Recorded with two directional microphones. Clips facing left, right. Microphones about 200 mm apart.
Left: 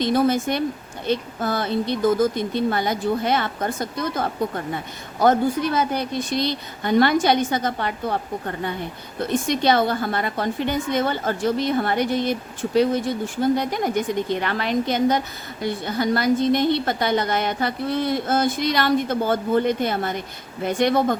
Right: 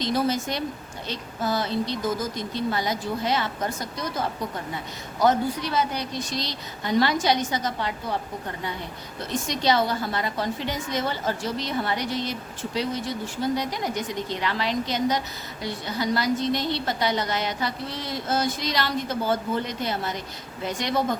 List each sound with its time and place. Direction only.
0.0 s a woman's voice: 55° left (ahead or behind)
9.3 s a woman's voice: 55° left (ahead or behind)